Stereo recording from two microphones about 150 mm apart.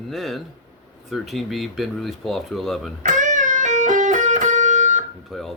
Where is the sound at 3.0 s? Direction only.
55° right (ahead or behind).